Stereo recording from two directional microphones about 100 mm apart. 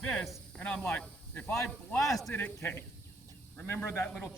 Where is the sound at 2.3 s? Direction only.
25° left (ahead or behind).